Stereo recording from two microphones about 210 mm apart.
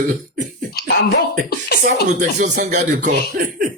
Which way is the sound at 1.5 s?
50° left (ahead or behind).